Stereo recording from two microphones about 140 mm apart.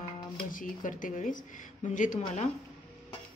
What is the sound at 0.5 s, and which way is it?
Speech, 75° left (ahead or behind).